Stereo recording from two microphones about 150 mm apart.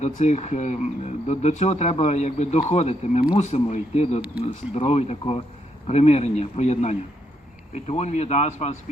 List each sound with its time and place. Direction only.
0.0 s speech: 50° left (ahead or behind)